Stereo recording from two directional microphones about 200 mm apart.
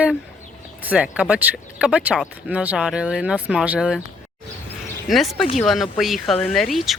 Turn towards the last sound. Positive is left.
turn(degrees=0)  # may be behind; listen again after turning